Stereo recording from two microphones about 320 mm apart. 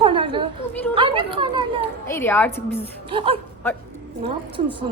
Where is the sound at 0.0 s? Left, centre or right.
Centre.